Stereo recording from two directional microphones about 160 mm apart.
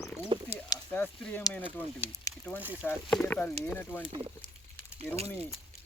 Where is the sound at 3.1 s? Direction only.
10° left (ahead or behind).